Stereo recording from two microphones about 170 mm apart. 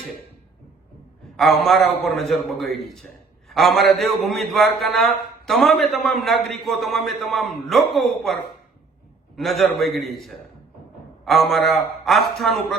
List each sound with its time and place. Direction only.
1.4 s a man's voice: centre (ahead or behind)